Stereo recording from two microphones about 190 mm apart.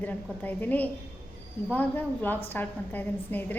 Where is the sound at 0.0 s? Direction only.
10° left (ahead or behind).